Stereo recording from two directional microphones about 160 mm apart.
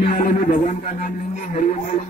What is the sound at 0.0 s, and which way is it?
Speech, 55° left (ahead or behind).